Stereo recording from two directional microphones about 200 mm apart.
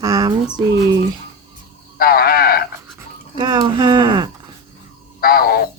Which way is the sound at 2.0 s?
50° left (ahead or behind).